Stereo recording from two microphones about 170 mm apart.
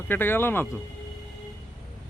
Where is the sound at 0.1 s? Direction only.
10° left (ahead or behind).